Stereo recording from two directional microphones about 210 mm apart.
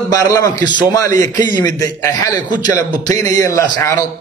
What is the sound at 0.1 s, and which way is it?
A man's voice, 15° left (ahead or behind).